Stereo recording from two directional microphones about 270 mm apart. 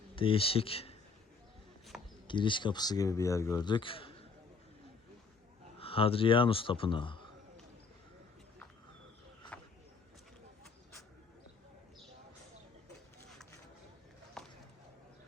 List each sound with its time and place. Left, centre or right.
0.2 s speech: centre
2.2 s speech: centre
5.8 s speech: left
14.4 s a sound: centre